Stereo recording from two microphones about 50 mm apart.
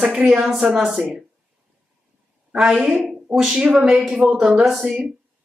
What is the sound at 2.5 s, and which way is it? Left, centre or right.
Speech, centre.